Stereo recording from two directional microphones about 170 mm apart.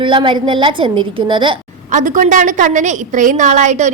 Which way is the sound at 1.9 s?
50° right (ahead or behind).